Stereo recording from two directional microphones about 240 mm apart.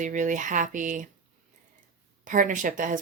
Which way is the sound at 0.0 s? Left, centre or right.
Right.